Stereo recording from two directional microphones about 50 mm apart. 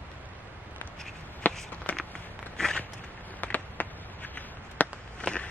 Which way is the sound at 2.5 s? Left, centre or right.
Centre.